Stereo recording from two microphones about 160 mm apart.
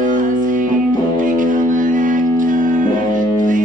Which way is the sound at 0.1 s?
55° right (ahead or behind).